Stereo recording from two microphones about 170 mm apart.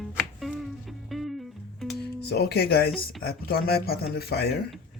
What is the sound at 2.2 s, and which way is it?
Speech, 75° left (ahead or behind).